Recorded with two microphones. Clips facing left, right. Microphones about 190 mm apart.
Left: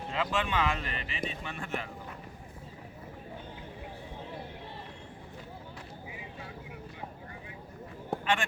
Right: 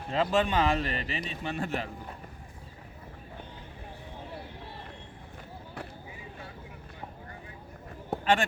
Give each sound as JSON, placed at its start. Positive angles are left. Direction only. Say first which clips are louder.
{"t": 0.1, "sound": "speech", "louder": "right 6 dB", "side_deg": -40}
{"t": 8.2, "sound": "speech", "louder": "right 5 dB", "side_deg": -40}